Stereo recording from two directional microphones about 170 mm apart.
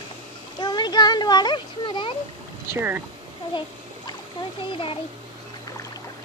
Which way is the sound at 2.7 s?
15° right (ahead or behind).